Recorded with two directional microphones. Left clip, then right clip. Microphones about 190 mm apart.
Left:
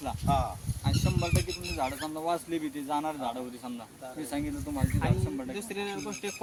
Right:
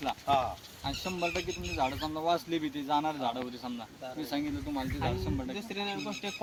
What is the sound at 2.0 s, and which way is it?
Speech, 20° left (ahead or behind).